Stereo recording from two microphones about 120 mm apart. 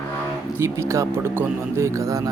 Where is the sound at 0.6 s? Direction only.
25° right (ahead or behind).